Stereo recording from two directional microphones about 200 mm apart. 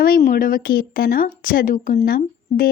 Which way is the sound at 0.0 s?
45° left (ahead or behind).